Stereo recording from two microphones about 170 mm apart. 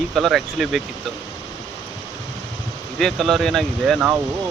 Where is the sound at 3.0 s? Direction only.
Centre (ahead or behind).